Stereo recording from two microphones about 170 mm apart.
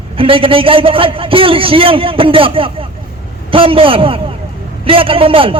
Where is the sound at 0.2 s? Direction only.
30° right (ahead or behind).